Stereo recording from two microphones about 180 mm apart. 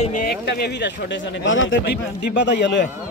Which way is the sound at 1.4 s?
90° left.